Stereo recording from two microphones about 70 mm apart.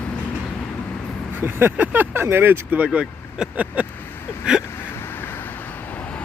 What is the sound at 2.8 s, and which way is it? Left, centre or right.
Speech, centre.